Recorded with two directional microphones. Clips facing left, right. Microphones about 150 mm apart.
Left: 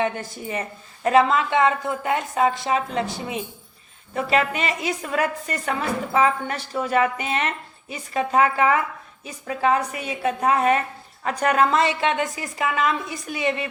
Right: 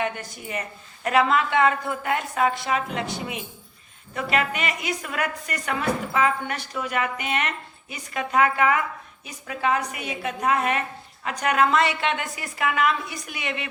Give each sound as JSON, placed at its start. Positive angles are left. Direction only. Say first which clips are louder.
{"t": 0.0, "sound": "a woman's voice", "louder": "left 4 dB", "side_deg": 30}